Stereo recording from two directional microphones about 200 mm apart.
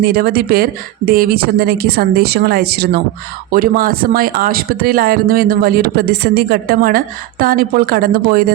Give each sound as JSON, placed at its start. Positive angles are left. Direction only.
{"t": 0.0, "sound": "speech", "side_deg": -50}